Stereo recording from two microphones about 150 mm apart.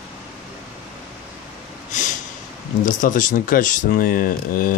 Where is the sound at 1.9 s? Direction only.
55° left (ahead or behind).